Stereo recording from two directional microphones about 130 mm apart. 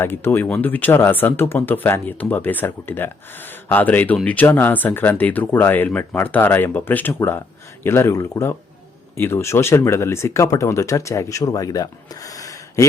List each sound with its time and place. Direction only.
0.0 s speech: 15° left (ahead or behind)